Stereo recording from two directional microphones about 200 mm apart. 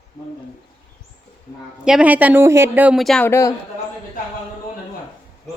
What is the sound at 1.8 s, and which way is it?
Speech, 5° right (ahead or behind).